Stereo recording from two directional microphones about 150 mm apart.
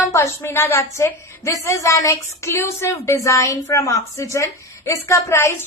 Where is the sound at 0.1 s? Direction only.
15° left (ahead or behind).